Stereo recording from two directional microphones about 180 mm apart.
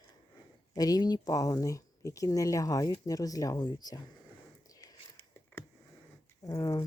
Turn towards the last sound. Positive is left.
turn(degrees=20)  # may be behind; listen again after turning